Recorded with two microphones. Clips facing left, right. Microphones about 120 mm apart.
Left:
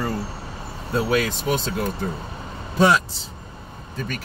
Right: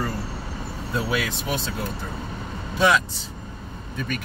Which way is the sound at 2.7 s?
35° left (ahead or behind).